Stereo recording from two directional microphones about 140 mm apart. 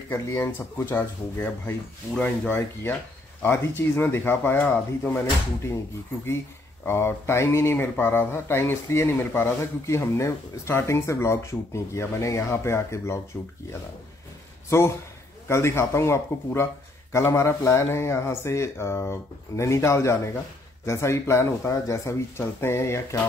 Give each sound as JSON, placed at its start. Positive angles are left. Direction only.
{"t": 0.1, "sound": "speech", "side_deg": 15}
{"t": 14.7, "sound": "speech", "side_deg": 20}